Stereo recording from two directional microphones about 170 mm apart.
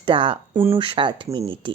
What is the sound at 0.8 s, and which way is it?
Speech, 30° right (ahead or behind).